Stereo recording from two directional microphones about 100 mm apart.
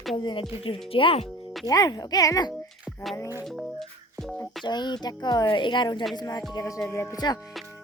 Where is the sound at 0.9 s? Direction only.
65° left (ahead or behind).